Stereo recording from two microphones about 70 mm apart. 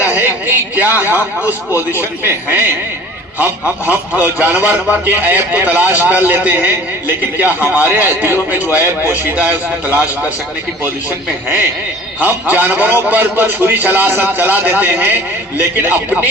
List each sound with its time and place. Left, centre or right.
0.0 s a sound: right
1.1 s a man's voice: right
7.9 s a man's voice: right
12.2 s a man's voice: right